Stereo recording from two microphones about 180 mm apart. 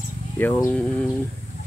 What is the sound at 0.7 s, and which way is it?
Speech, 5° left (ahead or behind).